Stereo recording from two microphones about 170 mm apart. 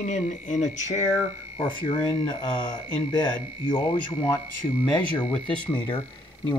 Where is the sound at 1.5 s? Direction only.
30° left (ahead or behind).